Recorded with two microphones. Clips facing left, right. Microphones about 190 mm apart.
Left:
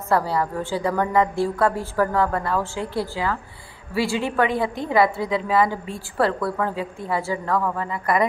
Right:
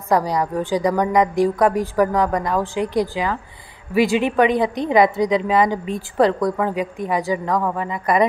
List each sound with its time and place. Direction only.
0.1 s a woman's voice: 15° right (ahead or behind)